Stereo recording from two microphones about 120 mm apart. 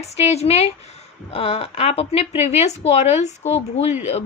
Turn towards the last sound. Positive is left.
turn(degrees=65)  # may be behind; listen again after turning